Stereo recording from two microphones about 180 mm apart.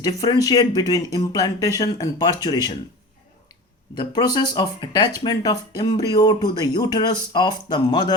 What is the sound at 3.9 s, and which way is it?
Speech, 25° left (ahead or behind).